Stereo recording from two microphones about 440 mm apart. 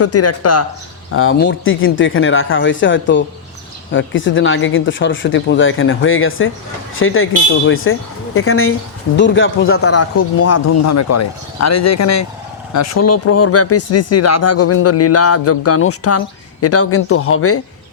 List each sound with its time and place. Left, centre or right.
0.0 s speech: left